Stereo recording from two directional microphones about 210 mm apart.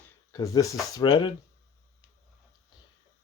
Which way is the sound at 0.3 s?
15° left (ahead or behind).